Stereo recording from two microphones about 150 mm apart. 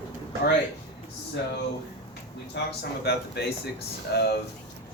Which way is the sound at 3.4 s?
90° left.